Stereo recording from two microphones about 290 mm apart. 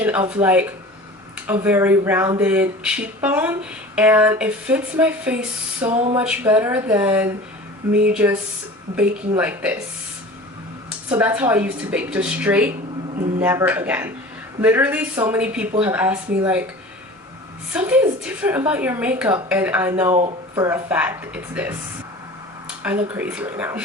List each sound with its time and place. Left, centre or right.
0.0 s speech: centre
5.9 s a sound: right
6.1 s speech: centre
11.2 s a woman's voice: centre
17.7 s a woman's voice: centre
22.8 s speech: centre